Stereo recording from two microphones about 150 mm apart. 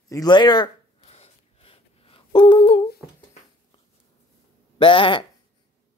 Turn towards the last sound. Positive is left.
turn(degrees=35)  # may be behind; listen again after turning